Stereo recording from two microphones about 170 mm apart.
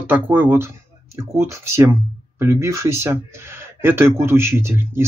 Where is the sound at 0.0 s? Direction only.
10° right (ahead or behind).